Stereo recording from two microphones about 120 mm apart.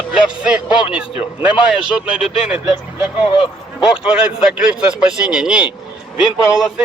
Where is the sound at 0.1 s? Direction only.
5° right (ahead or behind).